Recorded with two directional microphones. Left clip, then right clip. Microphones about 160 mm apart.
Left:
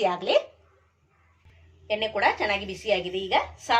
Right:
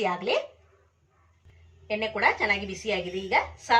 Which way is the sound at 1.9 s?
40° left (ahead or behind).